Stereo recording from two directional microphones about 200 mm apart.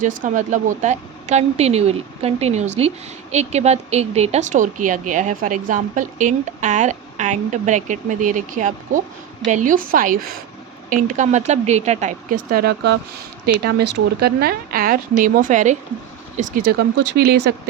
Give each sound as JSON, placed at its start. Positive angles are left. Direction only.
{"t": 0.2, "sound": "a woman's voice", "side_deg": -40}